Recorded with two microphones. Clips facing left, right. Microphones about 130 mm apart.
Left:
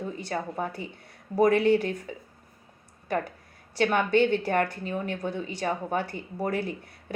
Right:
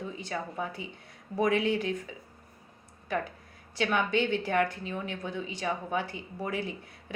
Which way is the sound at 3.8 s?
40° left (ahead or behind).